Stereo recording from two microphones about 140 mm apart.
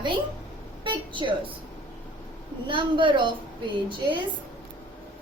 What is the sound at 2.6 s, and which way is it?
A woman's voice, 35° right (ahead or behind).